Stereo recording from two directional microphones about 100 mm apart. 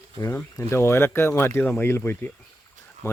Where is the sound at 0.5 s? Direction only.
25° left (ahead or behind).